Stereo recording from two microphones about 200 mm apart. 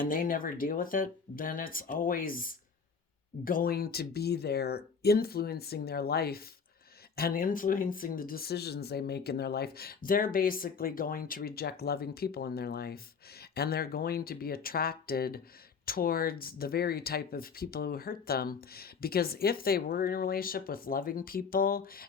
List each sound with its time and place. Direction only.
0.0 s speech: 45° left (ahead or behind)